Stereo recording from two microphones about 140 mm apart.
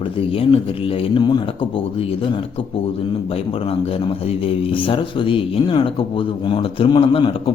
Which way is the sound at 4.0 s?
40° left (ahead or behind).